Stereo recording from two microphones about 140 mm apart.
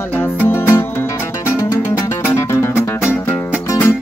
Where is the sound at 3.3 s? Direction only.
10° left (ahead or behind).